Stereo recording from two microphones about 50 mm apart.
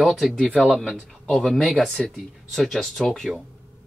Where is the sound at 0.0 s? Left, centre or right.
Centre.